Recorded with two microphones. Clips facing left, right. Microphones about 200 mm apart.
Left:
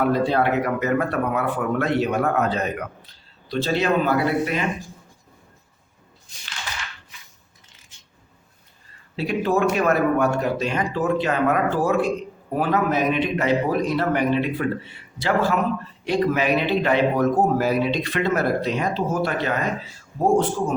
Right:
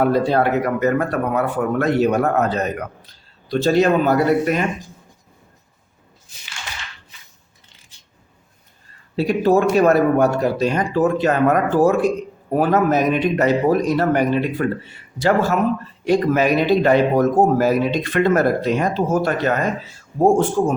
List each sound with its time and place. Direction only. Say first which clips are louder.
0.0 s a man's voice: right 3 dB; 40° right (ahead or behind)
9.1 s a man's voice: right 6 dB; 40° right (ahead or behind)